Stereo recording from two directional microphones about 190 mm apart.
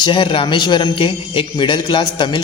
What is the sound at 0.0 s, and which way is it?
A man's voice, 25° left (ahead or behind).